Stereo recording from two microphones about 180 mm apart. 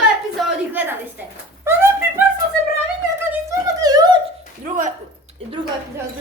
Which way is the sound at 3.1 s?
15° right (ahead or behind).